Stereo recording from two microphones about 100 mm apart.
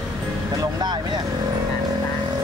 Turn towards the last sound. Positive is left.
turn(degrees=-45)  # may be behind; listen again after turning